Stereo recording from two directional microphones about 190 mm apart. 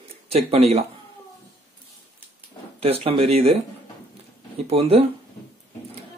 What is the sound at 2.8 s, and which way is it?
Speech, 30° right (ahead or behind).